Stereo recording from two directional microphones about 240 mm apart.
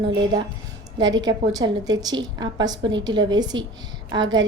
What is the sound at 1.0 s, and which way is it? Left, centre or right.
Speech, right.